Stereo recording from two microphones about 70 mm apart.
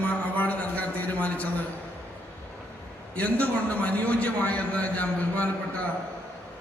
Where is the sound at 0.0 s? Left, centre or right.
Centre.